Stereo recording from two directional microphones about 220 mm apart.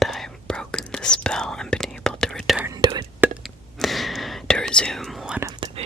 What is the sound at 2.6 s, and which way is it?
Whispering, 15° right (ahead or behind).